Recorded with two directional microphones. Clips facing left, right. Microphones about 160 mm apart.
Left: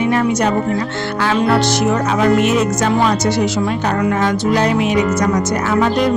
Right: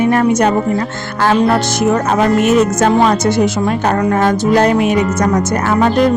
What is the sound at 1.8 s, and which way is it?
Speech, 45° right (ahead or behind).